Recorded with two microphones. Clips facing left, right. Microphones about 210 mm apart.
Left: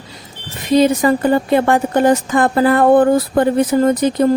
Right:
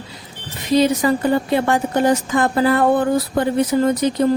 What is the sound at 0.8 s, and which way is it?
A woman's voice, 50° left (ahead or behind).